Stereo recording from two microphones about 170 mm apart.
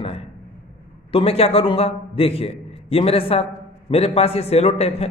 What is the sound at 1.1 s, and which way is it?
A man's voice, 35° left (ahead or behind).